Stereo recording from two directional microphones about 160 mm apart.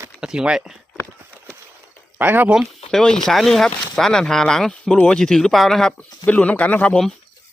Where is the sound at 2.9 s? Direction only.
5° left (ahead or behind).